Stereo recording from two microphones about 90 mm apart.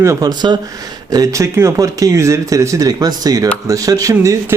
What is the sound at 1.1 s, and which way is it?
Speech, 40° right (ahead or behind).